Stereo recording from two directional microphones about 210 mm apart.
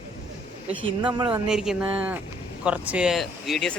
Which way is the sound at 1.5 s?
5° right (ahead or behind).